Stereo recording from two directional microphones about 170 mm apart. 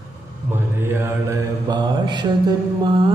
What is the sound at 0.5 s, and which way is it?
Mantra, 15° right (ahead or behind).